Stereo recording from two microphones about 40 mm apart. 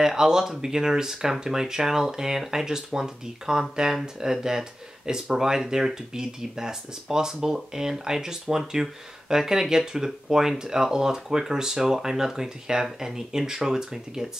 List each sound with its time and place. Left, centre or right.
0.0 s speech: centre